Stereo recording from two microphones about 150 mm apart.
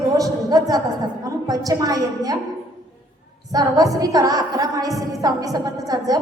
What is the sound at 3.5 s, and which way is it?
A woman's voice, 25° right (ahead or behind).